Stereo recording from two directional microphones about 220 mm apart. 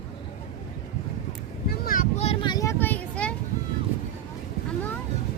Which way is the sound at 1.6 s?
45° left (ahead or behind).